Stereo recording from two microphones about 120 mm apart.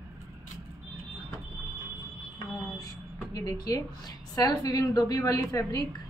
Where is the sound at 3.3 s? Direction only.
30° left (ahead or behind).